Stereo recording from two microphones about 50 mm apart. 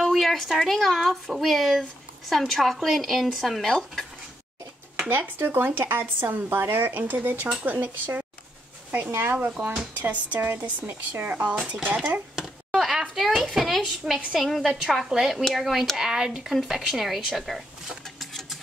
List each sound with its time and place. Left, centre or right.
0.0 s speech: centre
5.1 s speech: right
6.9 s speech: right
11.4 s speech: right
12.4 s speech: centre
14.7 s speech: centre
18.2 s a sound: centre